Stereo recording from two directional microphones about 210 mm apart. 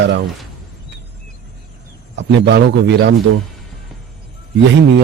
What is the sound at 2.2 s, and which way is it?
Speech, 55° right (ahead or behind).